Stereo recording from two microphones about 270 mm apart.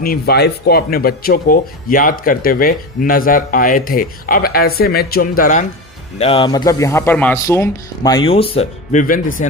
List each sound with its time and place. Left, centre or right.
0.0 s speech: left; by 8.2 s centre
8.3 s speech: left